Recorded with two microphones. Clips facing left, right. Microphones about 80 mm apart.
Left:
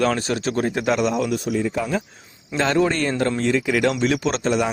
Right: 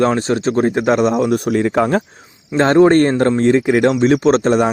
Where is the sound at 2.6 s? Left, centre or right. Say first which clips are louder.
Right 9 dB; right.